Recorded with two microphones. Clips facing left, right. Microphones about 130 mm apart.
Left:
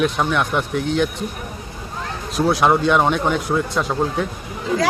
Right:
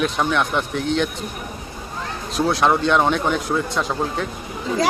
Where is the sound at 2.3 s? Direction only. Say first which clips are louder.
Left 2 dB; 5° left (ahead or behind).